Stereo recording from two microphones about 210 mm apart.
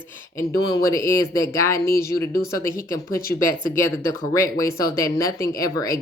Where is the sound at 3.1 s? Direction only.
45° left (ahead or behind).